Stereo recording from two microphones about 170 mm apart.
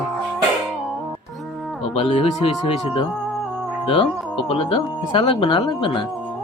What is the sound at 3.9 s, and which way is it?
A woman's voice, 35° left (ahead or behind).